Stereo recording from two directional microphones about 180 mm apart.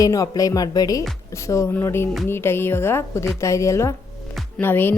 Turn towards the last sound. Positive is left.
turn(degrees=10)  # may be behind; listen again after turning